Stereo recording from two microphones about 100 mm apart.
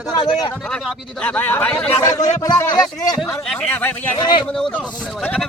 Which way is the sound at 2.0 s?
35° left (ahead or behind).